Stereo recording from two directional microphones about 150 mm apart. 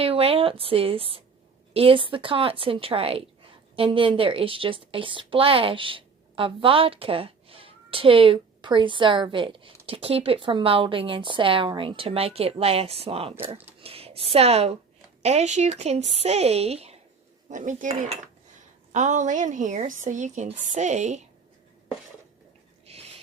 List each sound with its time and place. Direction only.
0.0 s a woman's voice: 40° right (ahead or behind)
17.5 s speech: 55° right (ahead or behind)
22.9 s a sound: 45° right (ahead or behind)